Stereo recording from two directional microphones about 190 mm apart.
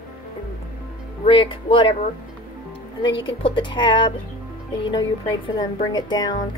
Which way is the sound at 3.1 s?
25° left (ahead or behind).